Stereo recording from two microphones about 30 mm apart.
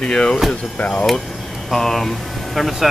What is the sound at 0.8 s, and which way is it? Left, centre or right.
Speech, left.